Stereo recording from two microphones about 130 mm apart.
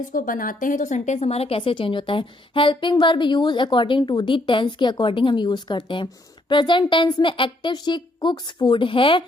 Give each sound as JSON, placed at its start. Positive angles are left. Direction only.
{"t": 0.1, "sound": "a woman's voice", "side_deg": 90}